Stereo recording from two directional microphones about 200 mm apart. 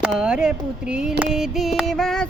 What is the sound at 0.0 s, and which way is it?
Speech, 5° right (ahead or behind).